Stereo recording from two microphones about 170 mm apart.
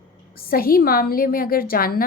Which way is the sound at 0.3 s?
60° left (ahead or behind).